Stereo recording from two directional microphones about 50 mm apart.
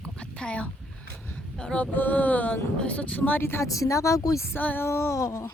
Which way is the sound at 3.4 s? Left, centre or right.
Left.